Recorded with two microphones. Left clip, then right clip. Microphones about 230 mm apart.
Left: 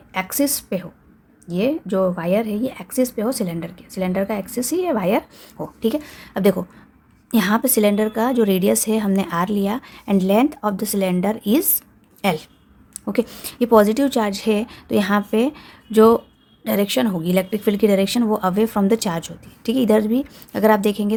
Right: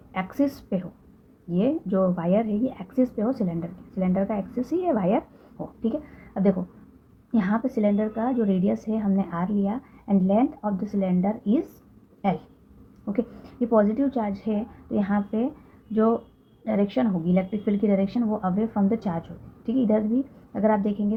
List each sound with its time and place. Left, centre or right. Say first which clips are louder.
0.1 s speech: left 5 dB; left
5.5 s speech: left 7 dB; left
13.1 s speech: left 7 dB; left